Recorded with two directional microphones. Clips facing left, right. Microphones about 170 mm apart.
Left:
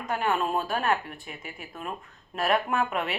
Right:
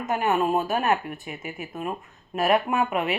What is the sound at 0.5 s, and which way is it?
Speech, 20° right (ahead or behind).